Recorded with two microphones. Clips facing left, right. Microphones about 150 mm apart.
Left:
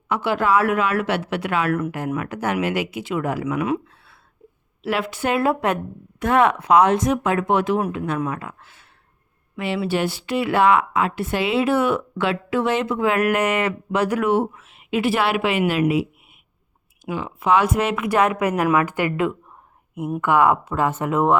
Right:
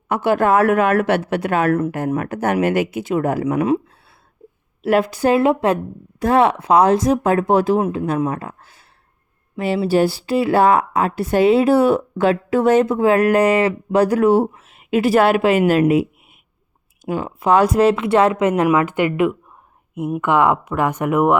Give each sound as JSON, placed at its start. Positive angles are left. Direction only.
{"t": 0.1, "sound": "speech", "side_deg": -50}
{"t": 4.8, "sound": "speech", "side_deg": -45}
{"t": 5.4, "sound": "speech", "side_deg": -25}
{"t": 7.8, "sound": "a woman's voice", "side_deg": -25}
{"t": 8.2, "sound": "a woman's voice", "side_deg": -35}